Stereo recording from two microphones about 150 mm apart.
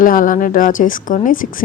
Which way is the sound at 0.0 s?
65° left (ahead or behind).